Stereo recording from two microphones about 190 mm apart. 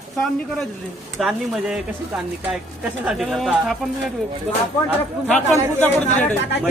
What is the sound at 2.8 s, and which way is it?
Speech, 5° right (ahead or behind).